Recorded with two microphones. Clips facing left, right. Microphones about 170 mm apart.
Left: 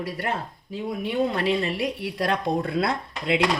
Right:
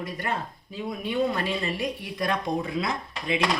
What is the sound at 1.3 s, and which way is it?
Speech, 65° left (ahead or behind).